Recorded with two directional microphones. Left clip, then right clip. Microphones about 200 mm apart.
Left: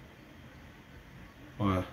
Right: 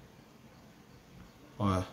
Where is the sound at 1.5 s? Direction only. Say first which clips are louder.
Left 1 dB; 5° right (ahead or behind).